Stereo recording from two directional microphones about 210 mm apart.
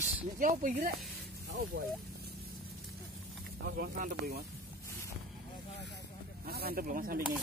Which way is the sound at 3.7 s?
45° right (ahead or behind).